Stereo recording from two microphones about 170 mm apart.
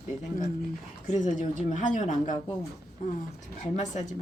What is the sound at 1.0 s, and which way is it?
A woman's voice, 45° left (ahead or behind).